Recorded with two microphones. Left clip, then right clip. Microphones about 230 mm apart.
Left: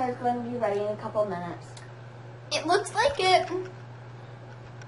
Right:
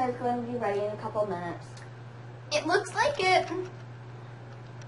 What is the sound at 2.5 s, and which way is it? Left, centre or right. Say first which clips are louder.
Speech: left 2 dB; centre.